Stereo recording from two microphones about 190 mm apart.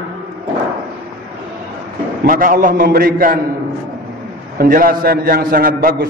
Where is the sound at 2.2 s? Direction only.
45° right (ahead or behind).